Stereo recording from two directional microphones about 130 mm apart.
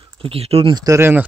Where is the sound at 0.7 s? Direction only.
30° right (ahead or behind).